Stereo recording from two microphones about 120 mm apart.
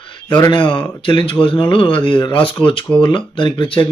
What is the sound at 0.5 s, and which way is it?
Speech, 45° left (ahead or behind).